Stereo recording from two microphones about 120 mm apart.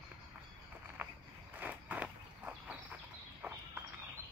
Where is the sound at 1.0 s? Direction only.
15° right (ahead or behind).